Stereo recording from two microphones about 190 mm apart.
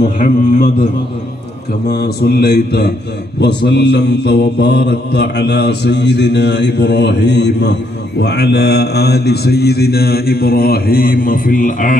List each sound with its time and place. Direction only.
0.2 s a man's voice: 45° left (ahead or behind)
1.9 s mantra: 55° left (ahead or behind)